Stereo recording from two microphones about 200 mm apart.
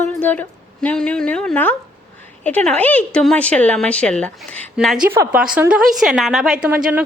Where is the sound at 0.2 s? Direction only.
10° left (ahead or behind).